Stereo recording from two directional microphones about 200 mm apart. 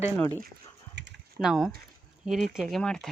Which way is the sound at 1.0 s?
60° right (ahead or behind).